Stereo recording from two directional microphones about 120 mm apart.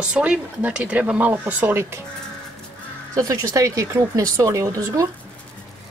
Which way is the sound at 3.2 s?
25° right (ahead or behind).